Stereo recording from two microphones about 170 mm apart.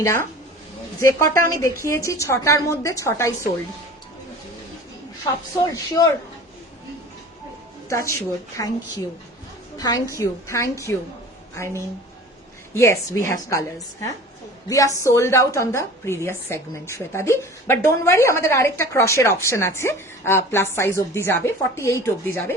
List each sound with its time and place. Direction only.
0.0 s a woman's voice: 15° left (ahead or behind)
5.2 s a woman's voice: 20° left (ahead or behind)
7.9 s a woman's voice: 15° left (ahead or behind)
14.7 s a woman's voice: 20° left (ahead or behind)